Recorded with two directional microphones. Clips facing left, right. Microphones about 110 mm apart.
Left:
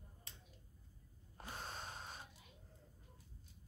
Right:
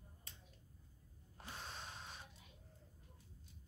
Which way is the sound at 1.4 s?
45° left (ahead or behind).